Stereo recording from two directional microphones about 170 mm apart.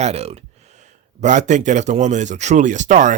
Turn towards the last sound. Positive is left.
turn(degrees=-45)  # may be behind; listen again after turning